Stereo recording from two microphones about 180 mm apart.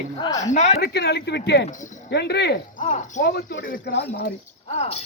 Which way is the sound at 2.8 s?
45° left (ahead or behind).